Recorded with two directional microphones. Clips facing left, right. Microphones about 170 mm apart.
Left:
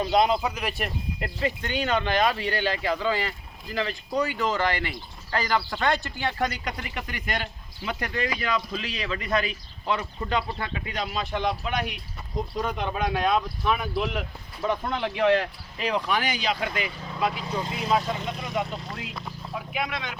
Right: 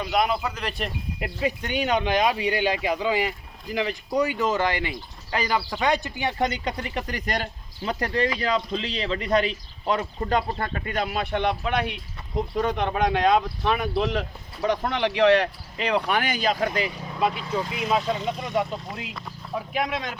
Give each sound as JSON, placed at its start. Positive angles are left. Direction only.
{"t": 0.0, "sound": "speech", "side_deg": 25}
{"t": 0.4, "sound": "speech", "side_deg": 10}
{"t": 1.2, "sound": "speech", "side_deg": -10}
{"t": 6.7, "sound": "speech", "side_deg": -35}
{"t": 16.8, "sound": "speech", "side_deg": -20}
{"t": 17.4, "sound": "speech", "side_deg": 20}
{"t": 19.7, "sound": "speech", "side_deg": -40}